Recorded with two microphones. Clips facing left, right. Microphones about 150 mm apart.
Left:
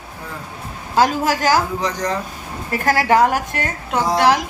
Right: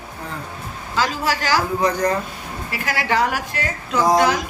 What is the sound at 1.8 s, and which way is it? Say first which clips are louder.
Speech: right 4 dB; 55° right (ahead or behind).